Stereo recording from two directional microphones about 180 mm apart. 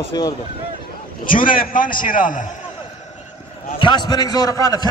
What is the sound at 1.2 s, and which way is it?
A man's voice, 50° left (ahead or behind).